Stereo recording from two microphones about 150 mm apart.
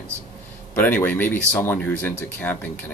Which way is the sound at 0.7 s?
10° left (ahead or behind).